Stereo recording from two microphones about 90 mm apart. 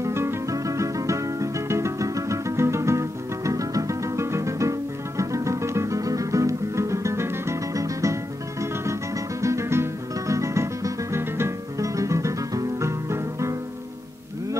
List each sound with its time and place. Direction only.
0.0 s music: 30° right (ahead or behind)